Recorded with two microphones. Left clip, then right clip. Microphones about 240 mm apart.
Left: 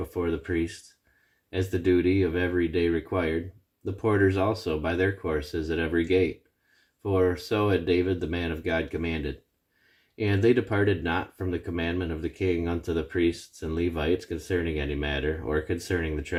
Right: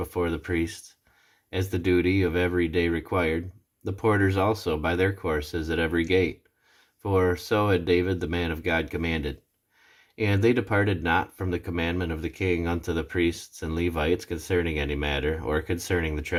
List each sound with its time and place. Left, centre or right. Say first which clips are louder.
0.1 s speech: even; right
1.7 s speech: even; right